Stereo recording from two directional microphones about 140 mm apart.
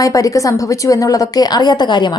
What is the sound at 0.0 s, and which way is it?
A woman's voice, 25° left (ahead or behind).